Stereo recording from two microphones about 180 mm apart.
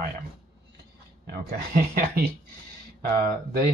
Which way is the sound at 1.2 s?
60° right (ahead or behind).